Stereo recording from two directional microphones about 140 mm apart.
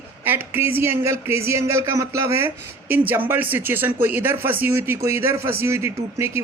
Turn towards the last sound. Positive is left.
turn(degrees=-20)  # may be behind; listen again after turning